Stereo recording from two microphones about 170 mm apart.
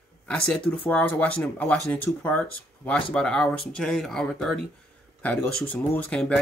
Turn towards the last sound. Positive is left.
turn(degrees=5)  # may be behind; listen again after turning